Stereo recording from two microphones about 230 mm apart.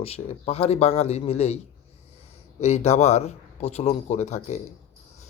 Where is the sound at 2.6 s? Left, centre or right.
Left.